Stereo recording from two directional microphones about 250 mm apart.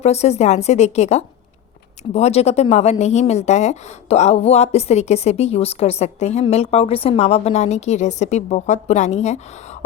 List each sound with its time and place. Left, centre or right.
0.0 s speech: left